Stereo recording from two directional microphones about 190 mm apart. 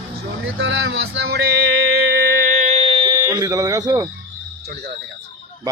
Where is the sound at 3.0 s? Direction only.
20° right (ahead or behind).